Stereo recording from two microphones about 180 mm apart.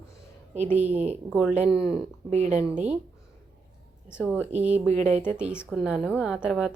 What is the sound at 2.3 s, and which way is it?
Speech, 40° right (ahead or behind).